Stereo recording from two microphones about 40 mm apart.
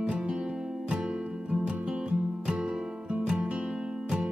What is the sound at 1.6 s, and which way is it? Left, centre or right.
Music, centre.